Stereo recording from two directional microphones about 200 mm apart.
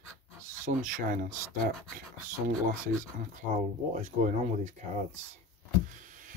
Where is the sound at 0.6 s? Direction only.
40° right (ahead or behind).